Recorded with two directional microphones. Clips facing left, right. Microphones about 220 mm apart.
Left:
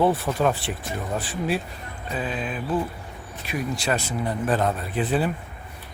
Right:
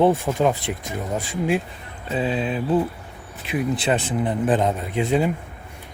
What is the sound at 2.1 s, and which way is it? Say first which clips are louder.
Speech: right 6 dB; 25° right (ahead or behind).